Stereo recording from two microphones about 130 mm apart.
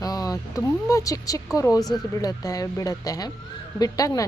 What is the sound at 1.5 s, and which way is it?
A woman's voice, 25° left (ahead or behind).